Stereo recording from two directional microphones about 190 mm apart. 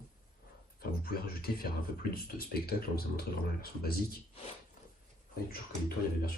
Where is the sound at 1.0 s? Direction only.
50° left (ahead or behind).